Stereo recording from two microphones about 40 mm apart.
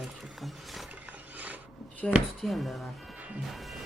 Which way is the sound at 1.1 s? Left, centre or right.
Right.